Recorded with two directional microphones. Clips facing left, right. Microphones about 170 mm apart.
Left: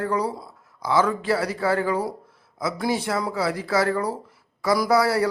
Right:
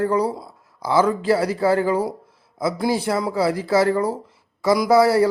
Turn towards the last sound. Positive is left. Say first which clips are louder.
# right 5 dB
turn(degrees=-25)  # may be behind; listen again after turning